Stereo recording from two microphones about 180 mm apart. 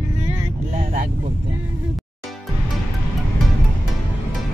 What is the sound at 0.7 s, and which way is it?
Speech, 50° right (ahead or behind).